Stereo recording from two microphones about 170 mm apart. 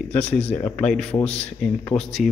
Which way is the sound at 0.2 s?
40° left (ahead or behind).